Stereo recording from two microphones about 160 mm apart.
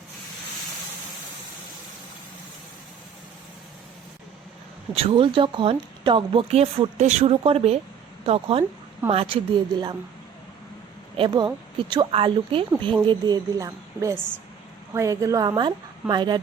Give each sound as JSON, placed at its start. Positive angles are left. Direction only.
{"t": 4.9, "sound": "speech", "side_deg": -35}
{"t": 11.2, "sound": "a woman's voice", "side_deg": -30}